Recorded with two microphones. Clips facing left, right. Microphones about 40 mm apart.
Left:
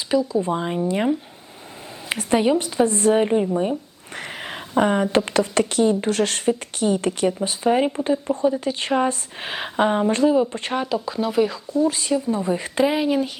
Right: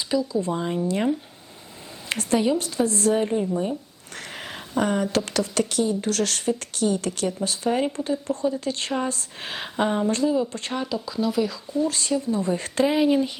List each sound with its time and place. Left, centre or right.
0.1 s speech: left
2.3 s speech: left
11.9 s speech: centre